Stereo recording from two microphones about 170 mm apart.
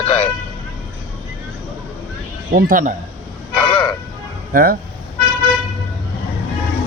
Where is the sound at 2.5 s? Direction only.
55° right (ahead or behind).